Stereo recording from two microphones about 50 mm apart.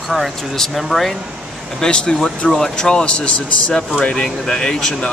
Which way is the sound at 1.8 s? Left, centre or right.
Centre.